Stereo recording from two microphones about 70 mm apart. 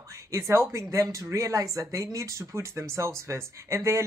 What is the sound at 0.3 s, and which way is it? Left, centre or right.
Speech, right.